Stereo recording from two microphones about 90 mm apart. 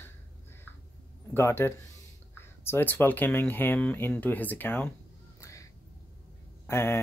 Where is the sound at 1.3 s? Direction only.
25° left (ahead or behind).